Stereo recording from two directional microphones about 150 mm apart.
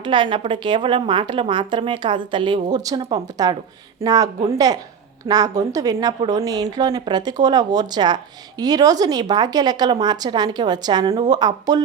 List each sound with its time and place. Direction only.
0.0 s a woman's voice: 30° right (ahead or behind)